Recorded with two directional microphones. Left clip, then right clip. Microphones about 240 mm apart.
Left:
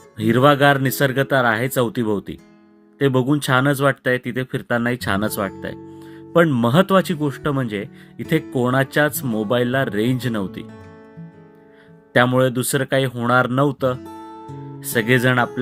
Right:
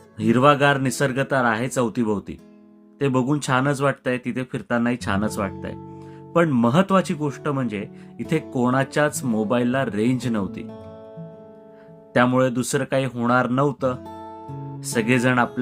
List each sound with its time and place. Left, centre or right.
0.2 s speech: centre
12.1 s speech: centre
14.2 s music: centre
14.8 s speech: centre